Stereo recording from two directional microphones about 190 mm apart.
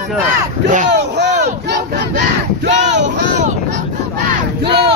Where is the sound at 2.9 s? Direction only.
70° right (ahead or behind).